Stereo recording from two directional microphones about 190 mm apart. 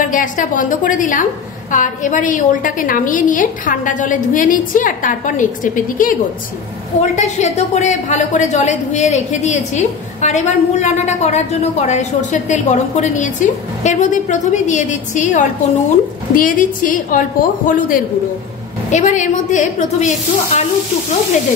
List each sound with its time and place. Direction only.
0.0 s a woman's voice: 45° left (ahead or behind)